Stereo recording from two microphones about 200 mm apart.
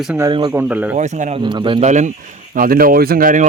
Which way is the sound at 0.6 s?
10° right (ahead or behind).